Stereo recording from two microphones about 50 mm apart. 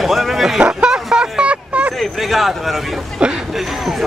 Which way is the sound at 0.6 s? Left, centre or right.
Centre.